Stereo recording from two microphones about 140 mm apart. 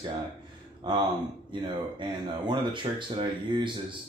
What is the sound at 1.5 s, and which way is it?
Speech, 35° right (ahead or behind).